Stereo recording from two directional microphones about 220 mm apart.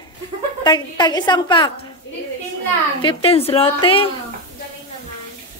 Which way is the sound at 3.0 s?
25° left (ahead or behind).